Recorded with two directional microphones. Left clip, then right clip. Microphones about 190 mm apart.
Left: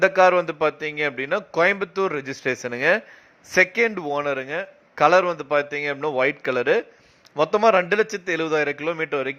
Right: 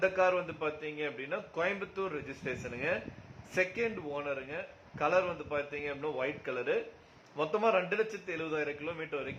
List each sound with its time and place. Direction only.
0.0 s a man's voice: 40° left (ahead or behind)